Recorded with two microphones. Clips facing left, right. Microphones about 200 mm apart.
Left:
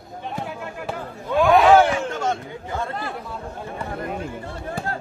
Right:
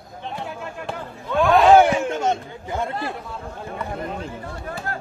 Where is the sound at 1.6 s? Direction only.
20° right (ahead or behind).